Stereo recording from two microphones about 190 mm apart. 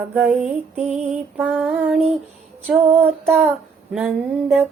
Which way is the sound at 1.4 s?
5° right (ahead or behind).